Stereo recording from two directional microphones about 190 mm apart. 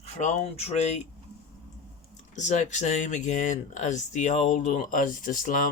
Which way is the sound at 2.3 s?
40° left (ahead or behind).